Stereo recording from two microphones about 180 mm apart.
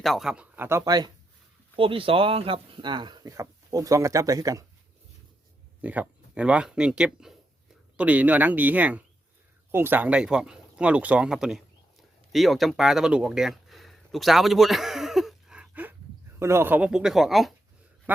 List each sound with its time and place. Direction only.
0.0 s speech: centre (ahead or behind); by 4.6 s 20° right (ahead or behind)
5.8 s speech: 10° right (ahead or behind)